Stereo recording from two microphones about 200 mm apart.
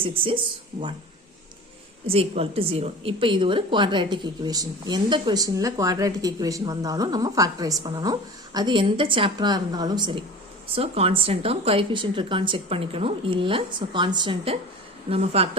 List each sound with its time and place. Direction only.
0.0 s a woman's voice: 25° right (ahead or behind)
2.0 s a woman's voice: 30° right (ahead or behind)